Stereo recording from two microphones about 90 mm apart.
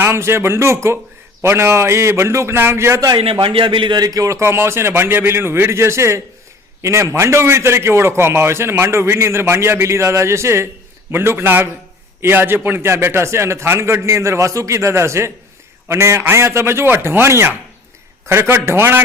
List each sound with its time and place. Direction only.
0.0 s a man's voice: 30° right (ahead or behind)
3.2 s a man's voice: 90° right; by 19.0 s 25° right (ahead or behind)